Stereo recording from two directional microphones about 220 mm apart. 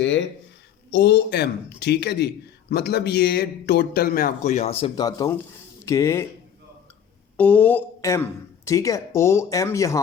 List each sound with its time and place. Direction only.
0.9 s a man's voice: 50° left (ahead or behind); by 6.2 s 15° left (ahead or behind)
7.3 s speech: 5° left (ahead or behind)